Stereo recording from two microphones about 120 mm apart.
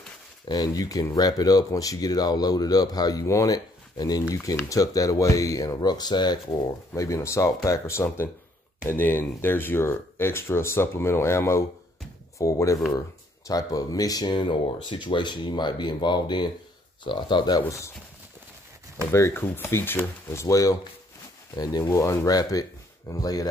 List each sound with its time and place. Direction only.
0.5 s speech: 30° left (ahead or behind)
6.9 s speech: 25° left (ahead or behind)
17.6 s speech: 25° left (ahead or behind)
19.1 s speech: 20° left (ahead or behind)